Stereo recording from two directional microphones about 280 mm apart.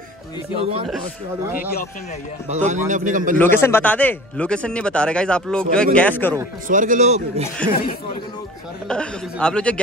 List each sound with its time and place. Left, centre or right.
0.6 s a man's voice: right
2.5 s a man's voice: right
3.3 s speech: centre
6.7 s a man's voice: right
7.7 s speech: left
8.8 s speech: centre